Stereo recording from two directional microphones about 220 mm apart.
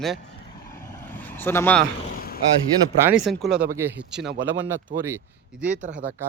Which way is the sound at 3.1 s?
Centre (ahead or behind).